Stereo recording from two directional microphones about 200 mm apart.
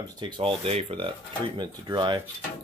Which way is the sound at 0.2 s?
25° right (ahead or behind).